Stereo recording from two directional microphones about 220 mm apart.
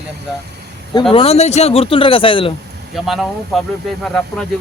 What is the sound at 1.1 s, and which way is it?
Speech, 25° left (ahead or behind).